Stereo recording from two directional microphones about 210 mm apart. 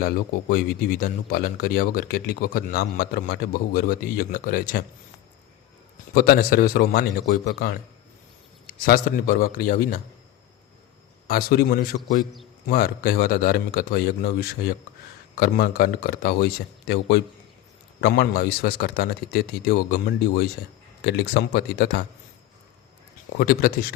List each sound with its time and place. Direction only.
0.0 s speech: 45° left (ahead or behind)
6.1 s speech: 45° left (ahead or behind)
11.3 s speech: 45° left (ahead or behind)
23.4 s speech: 45° left (ahead or behind)